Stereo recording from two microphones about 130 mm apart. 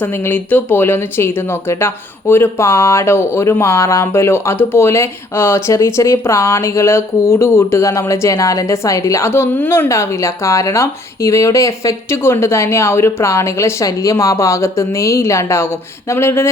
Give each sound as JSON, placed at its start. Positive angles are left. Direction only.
{"t": 0.0, "sound": "speech", "side_deg": 15}